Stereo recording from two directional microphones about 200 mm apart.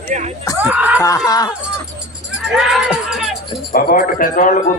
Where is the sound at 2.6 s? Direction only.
Centre (ahead or behind).